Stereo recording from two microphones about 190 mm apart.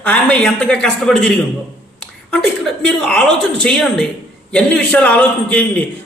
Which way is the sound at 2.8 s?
5° left (ahead or behind).